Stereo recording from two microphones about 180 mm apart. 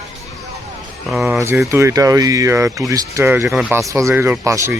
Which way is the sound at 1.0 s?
Centre (ahead or behind).